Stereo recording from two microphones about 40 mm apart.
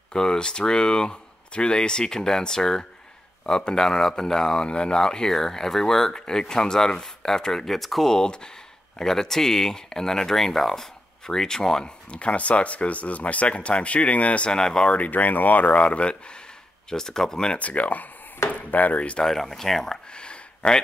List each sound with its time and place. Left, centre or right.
0.1 s speech: centre
4.6 s speech: left; by 8.1 s centre
8.1 s speech: centre
12.1 s speech: left
14.5 s speech: centre
15.0 s speech: left
16.9 s speech: centre
17.5 s speech: left
19.2 s speech: centre
20.1 s a sound: left